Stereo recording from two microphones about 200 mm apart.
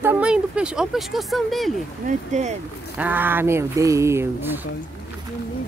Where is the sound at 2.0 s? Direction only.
35° right (ahead or behind).